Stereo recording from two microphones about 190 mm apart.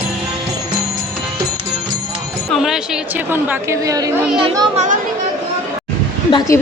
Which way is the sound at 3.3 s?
15° right (ahead or behind).